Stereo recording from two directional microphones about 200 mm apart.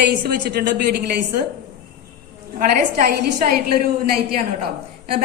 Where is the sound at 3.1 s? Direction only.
50° right (ahead or behind).